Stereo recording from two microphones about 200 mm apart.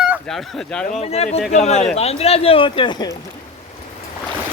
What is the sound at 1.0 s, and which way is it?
A man's voice, 30° left (ahead or behind).